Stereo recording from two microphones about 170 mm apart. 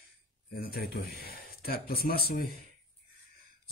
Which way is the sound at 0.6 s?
65° left (ahead or behind).